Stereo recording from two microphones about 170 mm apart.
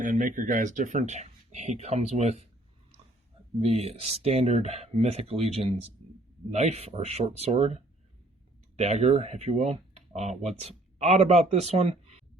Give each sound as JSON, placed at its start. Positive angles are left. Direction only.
{"t": 0.0, "sound": "speech", "side_deg": -50}
{"t": 3.6, "sound": "speech", "side_deg": -35}
{"t": 8.8, "sound": "speech", "side_deg": -40}